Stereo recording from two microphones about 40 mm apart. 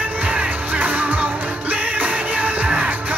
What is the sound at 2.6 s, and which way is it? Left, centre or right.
Music, right.